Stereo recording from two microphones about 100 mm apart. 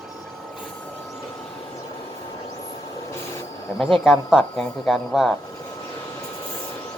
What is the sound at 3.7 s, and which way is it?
Speech, 20° left (ahead or behind).